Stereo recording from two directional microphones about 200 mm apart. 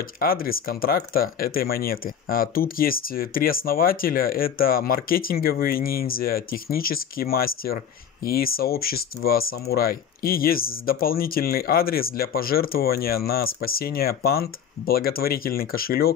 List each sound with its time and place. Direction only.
0.0 s speech: 45° left (ahead or behind)